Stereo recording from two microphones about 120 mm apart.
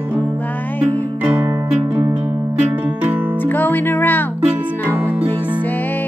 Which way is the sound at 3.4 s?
15° left (ahead or behind).